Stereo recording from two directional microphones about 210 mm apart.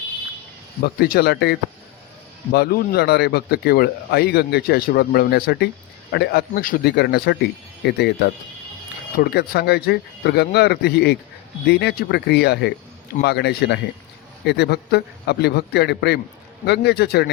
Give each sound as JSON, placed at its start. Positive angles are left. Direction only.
{"t": 0.8, "sound": "speech", "side_deg": 45}